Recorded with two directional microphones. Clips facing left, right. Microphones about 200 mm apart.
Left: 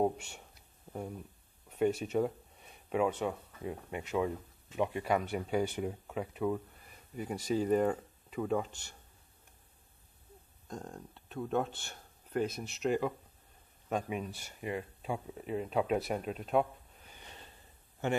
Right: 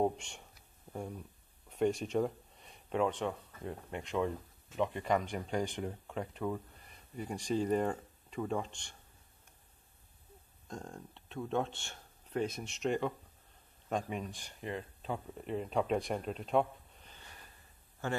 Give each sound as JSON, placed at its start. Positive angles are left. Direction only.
{"t": 0.0, "sound": "speech", "side_deg": 5}
{"t": 10.7, "sound": "speech", "side_deg": 0}
{"t": 17.2, "sound": "snort", "side_deg": 25}
{"t": 18.0, "sound": "a man's voice", "side_deg": 20}